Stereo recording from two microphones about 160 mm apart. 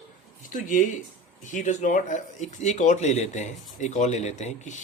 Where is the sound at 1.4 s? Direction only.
50° left (ahead or behind).